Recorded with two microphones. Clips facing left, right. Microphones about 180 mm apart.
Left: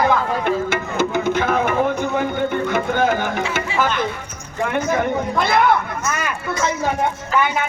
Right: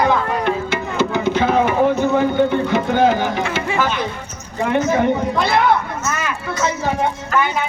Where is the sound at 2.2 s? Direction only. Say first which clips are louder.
Right 4 dB; 50° left (ahead or behind).